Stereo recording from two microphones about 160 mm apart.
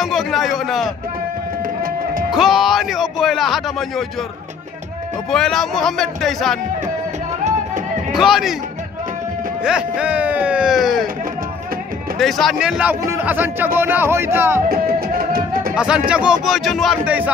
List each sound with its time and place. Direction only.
0.0 s speech: centre (ahead or behind)
1.8 s music: 65° right (ahead or behind)
2.3 s speech: centre (ahead or behind)
5.3 s speech: 5° left (ahead or behind)
8.1 s speech: centre (ahead or behind)
9.6 s speech: 5° right (ahead or behind)
12.2 s speech: centre (ahead or behind)
14.7 s music: 70° right (ahead or behind)
15.7 s speech: 5° right (ahead or behind)